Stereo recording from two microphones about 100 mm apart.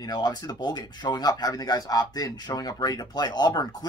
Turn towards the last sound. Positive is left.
turn(degrees=40)  # may be behind; listen again after turning